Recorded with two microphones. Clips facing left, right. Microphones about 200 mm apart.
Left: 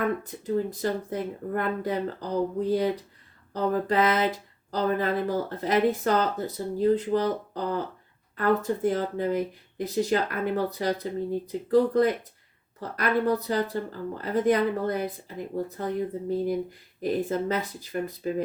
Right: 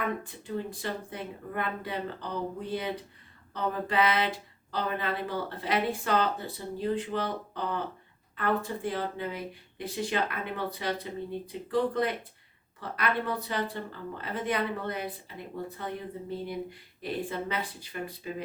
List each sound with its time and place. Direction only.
0.2 s speech: 40° left (ahead or behind)
17.0 s speech: 45° left (ahead or behind)